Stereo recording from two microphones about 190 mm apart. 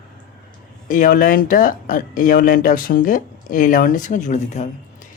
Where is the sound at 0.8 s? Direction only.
45° left (ahead or behind).